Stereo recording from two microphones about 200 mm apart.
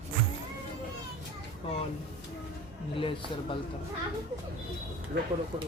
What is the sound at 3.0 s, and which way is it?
Speech, 25° left (ahead or behind).